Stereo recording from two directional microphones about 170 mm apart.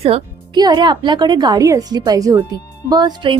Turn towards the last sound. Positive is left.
turn(degrees=-25)  # may be behind; listen again after turning